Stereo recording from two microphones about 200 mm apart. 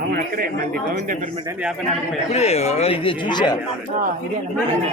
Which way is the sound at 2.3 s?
30° left (ahead or behind).